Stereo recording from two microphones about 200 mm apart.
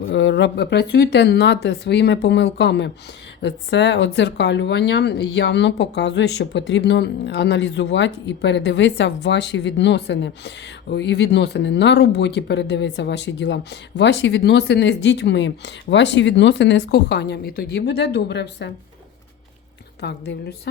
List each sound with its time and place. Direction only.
0.1 s speech: 65° left (ahead or behind)
20.0 s speech: 55° left (ahead or behind)